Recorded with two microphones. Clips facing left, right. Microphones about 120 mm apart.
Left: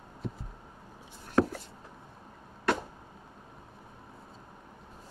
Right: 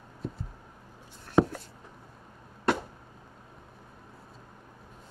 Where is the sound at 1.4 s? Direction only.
15° right (ahead or behind).